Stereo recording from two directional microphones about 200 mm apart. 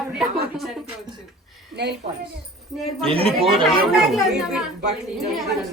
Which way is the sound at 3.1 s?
30° right (ahead or behind).